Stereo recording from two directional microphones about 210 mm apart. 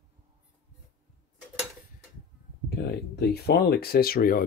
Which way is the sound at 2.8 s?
50° left (ahead or behind).